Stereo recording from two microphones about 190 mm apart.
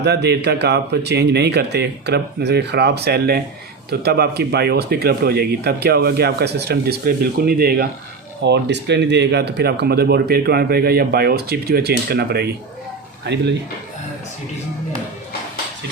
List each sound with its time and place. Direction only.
0.0 s speech: 60° right (ahead or behind)
8.4 s speech: 65° right (ahead or behind)